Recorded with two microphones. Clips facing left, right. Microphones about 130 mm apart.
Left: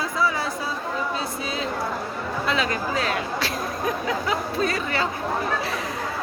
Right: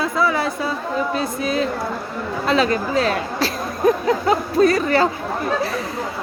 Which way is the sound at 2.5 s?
35° right (ahead or behind).